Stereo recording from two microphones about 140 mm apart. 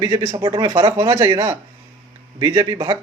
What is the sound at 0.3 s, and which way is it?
A man's voice, 35° right (ahead or behind).